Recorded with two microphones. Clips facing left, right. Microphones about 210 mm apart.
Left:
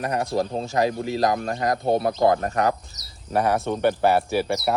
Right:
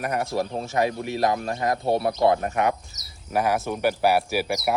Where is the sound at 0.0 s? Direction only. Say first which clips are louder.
Left 2 dB; 30° left (ahead or behind).